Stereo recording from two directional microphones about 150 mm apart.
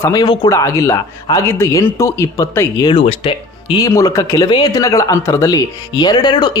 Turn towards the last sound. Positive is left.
turn(degrees=30)  # may be behind; listen again after turning